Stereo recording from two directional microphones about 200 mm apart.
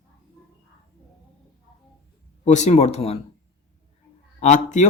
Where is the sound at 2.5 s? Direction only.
35° left (ahead or behind).